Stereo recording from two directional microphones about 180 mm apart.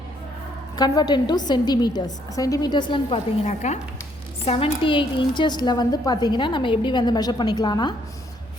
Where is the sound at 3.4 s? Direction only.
40° left (ahead or behind).